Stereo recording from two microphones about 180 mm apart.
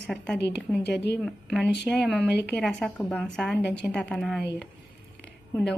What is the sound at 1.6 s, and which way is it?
Speech, 70° left (ahead or behind).